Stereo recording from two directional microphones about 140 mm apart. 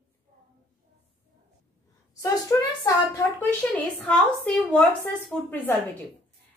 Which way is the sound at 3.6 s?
10° left (ahead or behind).